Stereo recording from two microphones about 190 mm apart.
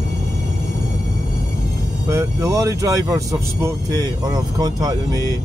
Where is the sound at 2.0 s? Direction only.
15° right (ahead or behind).